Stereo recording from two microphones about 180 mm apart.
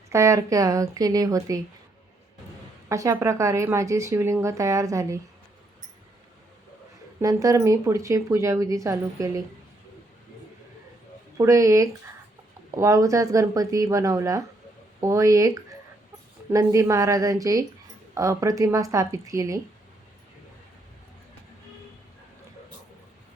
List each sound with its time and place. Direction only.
0.1 s a woman's voice: 15° right (ahead or behind)
2.9 s speech: 15° right (ahead or behind)
7.2 s speech: 20° right (ahead or behind)
11.3 s a woman's voice: 15° right (ahead or behind)